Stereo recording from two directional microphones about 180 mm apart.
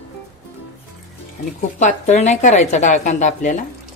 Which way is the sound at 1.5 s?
40° left (ahead or behind).